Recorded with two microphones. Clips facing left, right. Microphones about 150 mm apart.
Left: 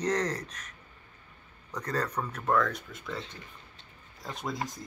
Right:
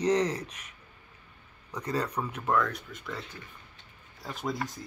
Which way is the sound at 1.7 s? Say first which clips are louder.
Right 1 dB; 10° right (ahead or behind).